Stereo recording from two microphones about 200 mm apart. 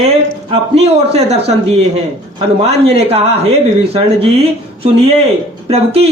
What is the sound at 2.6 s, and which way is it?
Speech, 30° right (ahead or behind).